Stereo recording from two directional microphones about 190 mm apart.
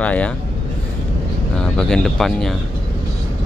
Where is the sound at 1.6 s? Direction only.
5° left (ahead or behind).